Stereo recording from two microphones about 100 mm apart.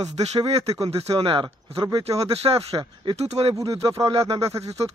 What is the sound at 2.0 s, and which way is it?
Speech, 90° right.